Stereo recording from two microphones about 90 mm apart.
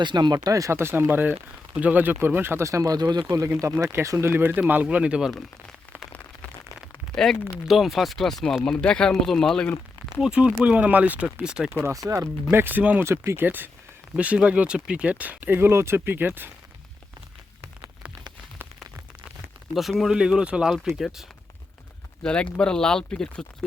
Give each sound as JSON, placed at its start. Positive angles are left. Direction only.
{"t": 0.0, "sound": "speech", "side_deg": -55}
{"t": 0.3, "sound": "speech", "side_deg": -40}
{"t": 3.2, "sound": "speech", "side_deg": -35}
{"t": 7.6, "sound": "speech", "side_deg": 0}
{"t": 10.2, "sound": "speech", "side_deg": -10}
{"t": 11.9, "sound": "speech", "side_deg": -40}
{"t": 19.7, "sound": "speech", "side_deg": 0}
{"t": 22.2, "sound": "speech", "side_deg": 10}